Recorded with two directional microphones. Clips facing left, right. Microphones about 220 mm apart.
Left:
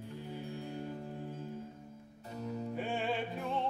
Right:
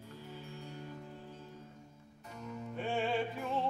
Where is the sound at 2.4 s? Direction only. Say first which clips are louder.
Left 5 dB; 35° left (ahead or behind).